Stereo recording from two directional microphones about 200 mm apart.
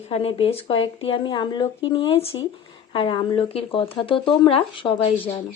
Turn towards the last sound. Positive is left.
turn(degrees=25)  # may be behind; listen again after turning